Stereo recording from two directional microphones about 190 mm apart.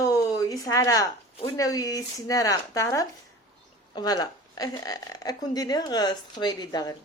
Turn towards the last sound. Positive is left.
turn(degrees=20)  # may be behind; listen again after turning